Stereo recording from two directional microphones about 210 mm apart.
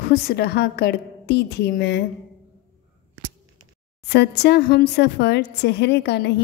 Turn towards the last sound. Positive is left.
turn(degrees=50)  # may be behind; listen again after turning